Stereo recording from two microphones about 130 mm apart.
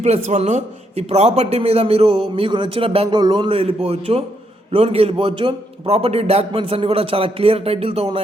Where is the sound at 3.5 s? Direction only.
50° right (ahead or behind).